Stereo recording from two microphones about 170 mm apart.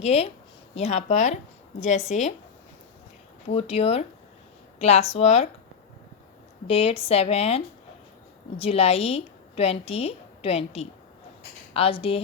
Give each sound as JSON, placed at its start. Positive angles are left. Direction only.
{"t": 0.0, "sound": "speech", "side_deg": 40}
{"t": 3.5, "sound": "speech", "side_deg": 35}
{"t": 6.7, "sound": "a woman's voice", "side_deg": 35}